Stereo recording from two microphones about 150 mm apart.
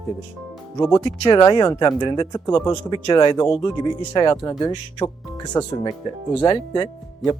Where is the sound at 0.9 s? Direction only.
25° left (ahead or behind).